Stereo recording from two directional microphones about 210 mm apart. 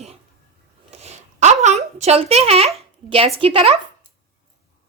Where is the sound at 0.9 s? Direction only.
30° right (ahead or behind).